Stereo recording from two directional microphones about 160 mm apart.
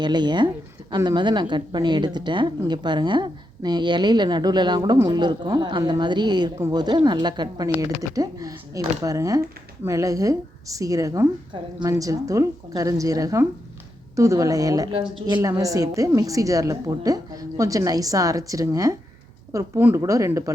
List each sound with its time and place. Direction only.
0.0 s a woman's voice: 25° right (ahead or behind)